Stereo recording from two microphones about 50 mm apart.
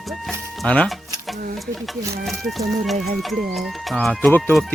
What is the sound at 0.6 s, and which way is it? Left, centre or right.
Speech, left.